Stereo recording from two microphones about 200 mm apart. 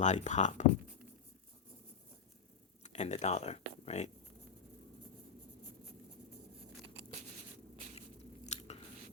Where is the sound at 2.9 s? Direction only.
35° left (ahead or behind).